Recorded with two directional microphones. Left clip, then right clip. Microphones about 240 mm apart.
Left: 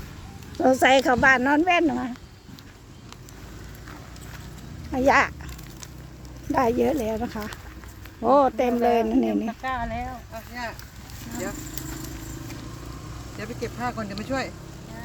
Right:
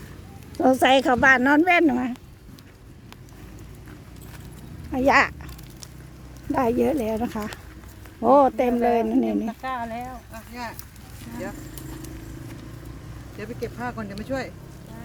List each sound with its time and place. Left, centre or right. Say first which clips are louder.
0.5 s speech: even; centre
4.9 s a child's voice: right 1 dB; centre
6.5 s speech: even; centre
10.3 s speech: left 2 dB; right
13.4 s speech: left 1 dB; centre